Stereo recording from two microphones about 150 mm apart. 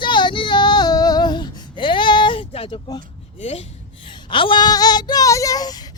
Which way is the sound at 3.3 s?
45° left (ahead or behind).